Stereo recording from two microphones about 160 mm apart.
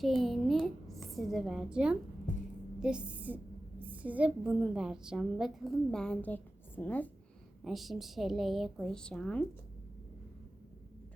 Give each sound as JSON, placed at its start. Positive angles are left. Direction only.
{"t": 0.0, "sound": "a woman's voice", "side_deg": 0}
{"t": 2.3, "sound": "a sound", "side_deg": 50}
{"t": 2.8, "sound": "a woman's voice", "side_deg": -5}
{"t": 7.6, "sound": "a woman's voice", "side_deg": 0}